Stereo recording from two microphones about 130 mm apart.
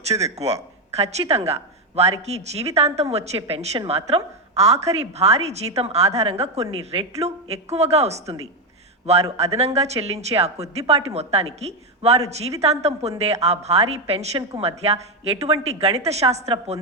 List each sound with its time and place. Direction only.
0.3 s a woman's voice: 55° right (ahead or behind)
9.4 s a woman's voice: 55° right (ahead or behind)